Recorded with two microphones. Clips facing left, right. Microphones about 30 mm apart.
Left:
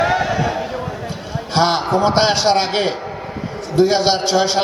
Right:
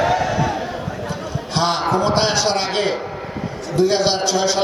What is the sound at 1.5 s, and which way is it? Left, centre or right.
A man's voice, left.